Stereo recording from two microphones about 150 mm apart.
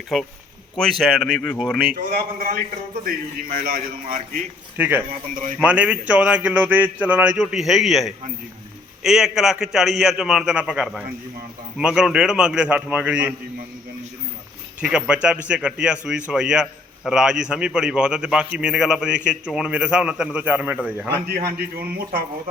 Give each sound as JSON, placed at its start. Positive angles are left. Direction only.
{"t": 0.1, "sound": "a man's voice", "side_deg": 0}
{"t": 2.0, "sound": "speech", "side_deg": -75}
{"t": 4.8, "sound": "a man's voice", "side_deg": -10}
{"t": 5.3, "sound": "speech", "side_deg": -55}
{"t": 5.6, "sound": "a man's voice", "side_deg": -10}
{"t": 14.8, "sound": "a man's voice", "side_deg": -5}
{"t": 21.4, "sound": "a man's voice", "side_deg": -90}